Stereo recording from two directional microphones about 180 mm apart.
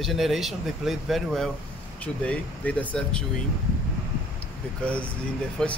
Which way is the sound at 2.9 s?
5° left (ahead or behind).